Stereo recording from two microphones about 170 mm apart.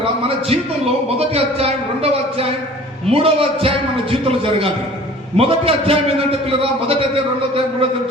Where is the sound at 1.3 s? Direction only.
35° right (ahead or behind).